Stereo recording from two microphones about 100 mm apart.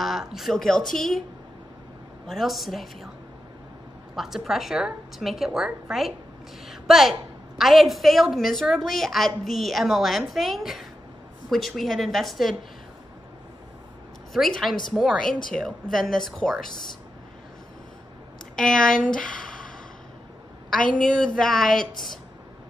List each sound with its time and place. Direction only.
0.0 s a woman's voice: 5° right (ahead or behind)
2.2 s a woman's voice: centre (ahead or behind)
4.1 s a woman's voice: 5° right (ahead or behind)
14.3 s a woman's voice: centre (ahead or behind)
18.6 s a woman's voice: 5° left (ahead or behind)
21.0 s a woman's voice: 10° left (ahead or behind)